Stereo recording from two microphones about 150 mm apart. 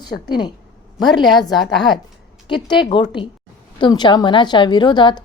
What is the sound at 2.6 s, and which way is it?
A woman's voice, 30° left (ahead or behind).